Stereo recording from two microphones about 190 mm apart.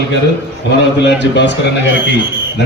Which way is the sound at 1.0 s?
65° left (ahead or behind).